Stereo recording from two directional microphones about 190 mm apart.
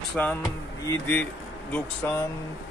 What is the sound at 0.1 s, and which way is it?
Speech, 10° left (ahead or behind).